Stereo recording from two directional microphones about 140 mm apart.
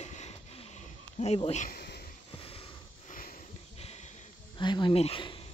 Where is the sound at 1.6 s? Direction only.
90° left.